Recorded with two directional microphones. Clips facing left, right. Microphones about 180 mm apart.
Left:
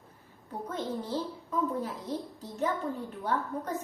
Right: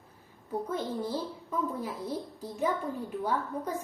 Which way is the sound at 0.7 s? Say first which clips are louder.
Left 1 dB; 10° right (ahead or behind).